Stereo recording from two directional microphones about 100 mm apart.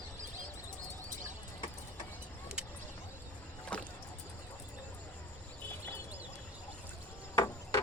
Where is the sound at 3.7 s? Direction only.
10° left (ahead or behind).